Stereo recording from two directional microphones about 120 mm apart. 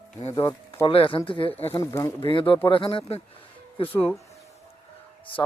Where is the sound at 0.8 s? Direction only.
45° left (ahead or behind).